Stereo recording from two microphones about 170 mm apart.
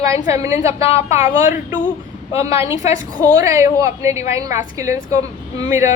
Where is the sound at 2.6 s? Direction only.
15° right (ahead or behind).